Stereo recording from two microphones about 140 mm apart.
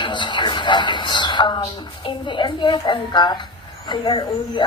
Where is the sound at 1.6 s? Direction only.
40° left (ahead or behind).